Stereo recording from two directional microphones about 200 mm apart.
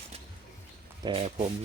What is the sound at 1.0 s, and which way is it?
Speech, 30° right (ahead or behind).